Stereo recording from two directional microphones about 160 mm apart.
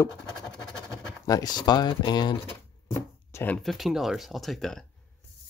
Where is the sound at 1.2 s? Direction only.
25° left (ahead or behind).